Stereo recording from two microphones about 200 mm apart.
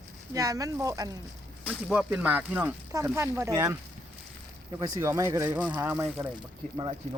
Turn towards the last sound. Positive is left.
turn(degrees=-25)  # may be behind; listen again after turning